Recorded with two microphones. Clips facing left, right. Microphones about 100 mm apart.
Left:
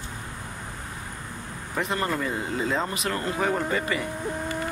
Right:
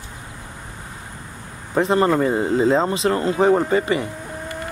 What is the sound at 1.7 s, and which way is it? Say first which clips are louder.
Speech: right 10 dB; 30° right (ahead or behind).